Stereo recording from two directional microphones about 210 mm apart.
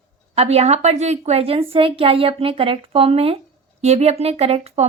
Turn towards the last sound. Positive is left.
turn(degrees=-30)  # may be behind; listen again after turning